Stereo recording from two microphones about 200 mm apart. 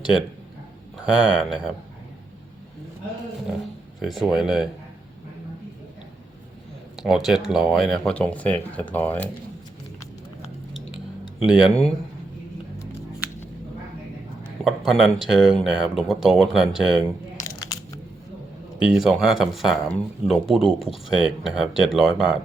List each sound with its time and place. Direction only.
1.0 s speech: 5° right (ahead or behind)
4.0 s speech: centre (ahead or behind)
6.9 s speech: centre (ahead or behind)
11.4 s speech: 5° left (ahead or behind)
14.6 s speech: centre (ahead or behind)
17.4 s crunch: 15° left (ahead or behind)
18.9 s speech: centre (ahead or behind)